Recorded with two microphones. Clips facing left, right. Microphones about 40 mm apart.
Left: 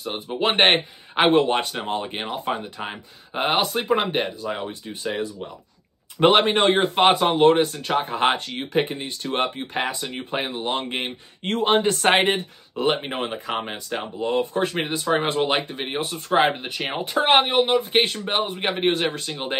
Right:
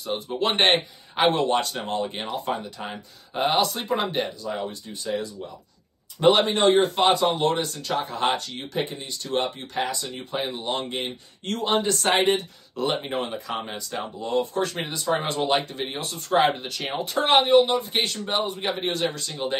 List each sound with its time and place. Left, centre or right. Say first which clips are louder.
0.0 s speech: left 2 dB; left
18.3 s speech: left 2 dB; left